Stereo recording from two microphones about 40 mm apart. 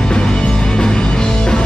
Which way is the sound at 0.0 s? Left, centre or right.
Centre.